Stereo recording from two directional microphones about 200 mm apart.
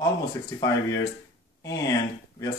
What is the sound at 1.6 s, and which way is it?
Speech, 20° left (ahead or behind).